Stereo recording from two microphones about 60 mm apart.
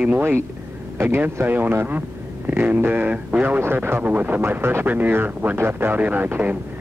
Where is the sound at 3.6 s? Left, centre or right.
Right.